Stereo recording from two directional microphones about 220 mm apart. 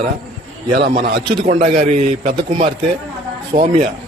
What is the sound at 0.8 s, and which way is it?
Speech, 50° right (ahead or behind).